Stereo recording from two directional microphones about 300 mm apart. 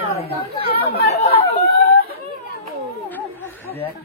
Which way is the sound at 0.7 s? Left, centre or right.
Left.